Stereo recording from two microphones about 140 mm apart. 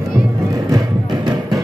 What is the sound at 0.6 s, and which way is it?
Music, 25° right (ahead or behind).